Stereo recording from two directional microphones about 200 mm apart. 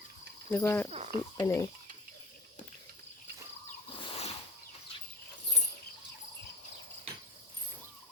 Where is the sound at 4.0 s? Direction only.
30° left (ahead or behind).